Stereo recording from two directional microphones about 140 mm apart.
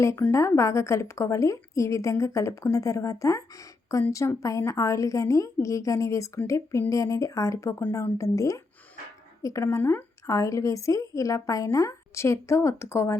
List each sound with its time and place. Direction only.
0.0 s a woman's voice: 20° left (ahead or behind)